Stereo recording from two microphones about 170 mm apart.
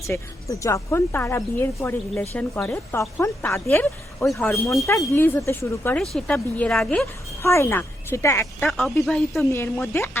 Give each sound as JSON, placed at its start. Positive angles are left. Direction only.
{"t": 0.0, "sound": "speech", "side_deg": 15}
{"t": 7.4, "sound": "speech", "side_deg": 15}
{"t": 8.6, "sound": "speech", "side_deg": 0}
{"t": 9.5, "sound": "speech", "side_deg": 15}